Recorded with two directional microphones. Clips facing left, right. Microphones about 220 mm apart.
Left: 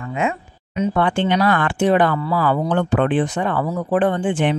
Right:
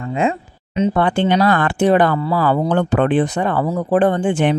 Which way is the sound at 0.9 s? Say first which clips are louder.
Right 1 dB; 35° right (ahead or behind).